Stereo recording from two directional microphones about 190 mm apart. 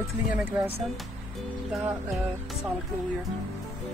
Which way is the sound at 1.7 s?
5° right (ahead or behind).